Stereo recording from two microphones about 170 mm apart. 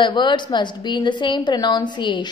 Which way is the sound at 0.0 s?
25° left (ahead or behind).